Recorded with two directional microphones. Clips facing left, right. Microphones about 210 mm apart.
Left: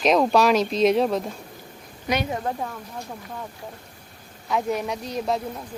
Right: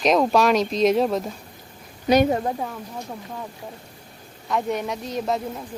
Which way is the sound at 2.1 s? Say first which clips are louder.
Right 8 dB; 35° right (ahead or behind).